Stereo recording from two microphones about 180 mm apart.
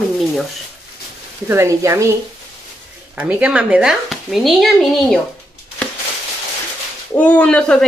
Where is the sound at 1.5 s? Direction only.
15° right (ahead or behind).